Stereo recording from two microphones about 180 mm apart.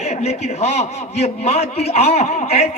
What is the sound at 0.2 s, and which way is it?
A man's voice, 35° left (ahead or behind).